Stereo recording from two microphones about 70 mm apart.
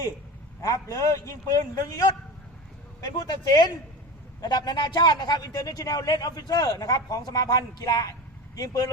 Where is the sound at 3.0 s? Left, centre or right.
Left.